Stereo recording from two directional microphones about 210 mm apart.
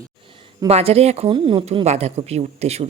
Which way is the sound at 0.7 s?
30° right (ahead or behind).